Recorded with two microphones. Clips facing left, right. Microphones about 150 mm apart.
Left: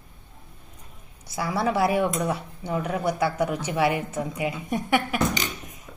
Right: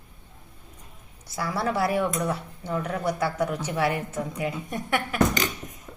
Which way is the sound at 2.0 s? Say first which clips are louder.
Left 2 dB; 20° left (ahead or behind).